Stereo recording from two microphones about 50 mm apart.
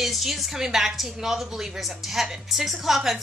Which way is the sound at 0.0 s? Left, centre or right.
Centre.